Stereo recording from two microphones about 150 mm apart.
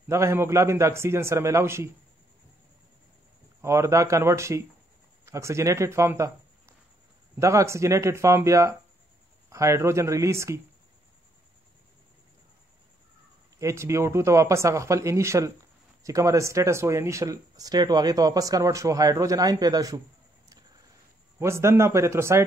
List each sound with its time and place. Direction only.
0.1 s a man's voice: 15° right (ahead or behind)
3.6 s speech: 20° right (ahead or behind)
13.6 s speech: 20° right (ahead or behind)
21.4 s a man's voice: 20° right (ahead or behind)